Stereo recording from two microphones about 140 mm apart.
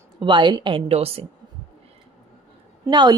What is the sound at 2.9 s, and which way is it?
Speech, 30° right (ahead or behind).